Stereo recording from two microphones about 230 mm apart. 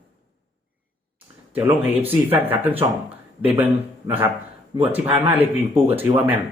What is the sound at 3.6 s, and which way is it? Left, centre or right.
A man's voice, centre.